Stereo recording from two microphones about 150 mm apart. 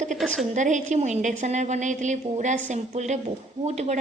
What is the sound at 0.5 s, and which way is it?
A woman's voice, 55° right (ahead or behind).